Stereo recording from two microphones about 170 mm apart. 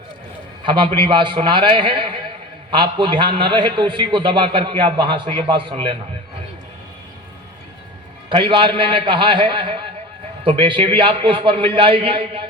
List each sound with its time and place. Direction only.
0.6 s a man's voice: 30° right (ahead or behind)
8.3 s a man's voice: 30° right (ahead or behind)